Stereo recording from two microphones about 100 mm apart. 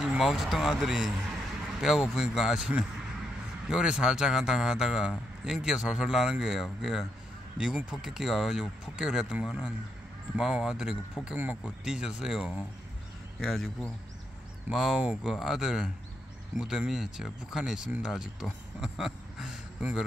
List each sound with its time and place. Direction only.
0.0 s speech: 5° right (ahead or behind)
11.3 s speech: 15° right (ahead or behind)